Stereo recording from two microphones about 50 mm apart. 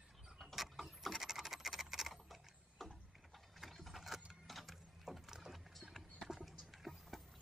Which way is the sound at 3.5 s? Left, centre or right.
Centre.